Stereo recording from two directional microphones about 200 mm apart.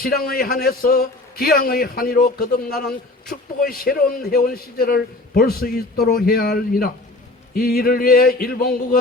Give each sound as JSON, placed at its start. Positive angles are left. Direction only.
{"t": 0.0, "sound": "a man's voice", "side_deg": 50}